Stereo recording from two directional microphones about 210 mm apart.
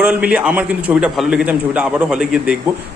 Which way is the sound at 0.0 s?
5° right (ahead or behind).